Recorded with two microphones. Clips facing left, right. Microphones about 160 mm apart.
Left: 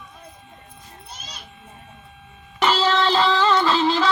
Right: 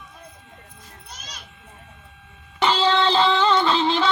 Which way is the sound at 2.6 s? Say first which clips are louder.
Even; 20° right (ahead or behind).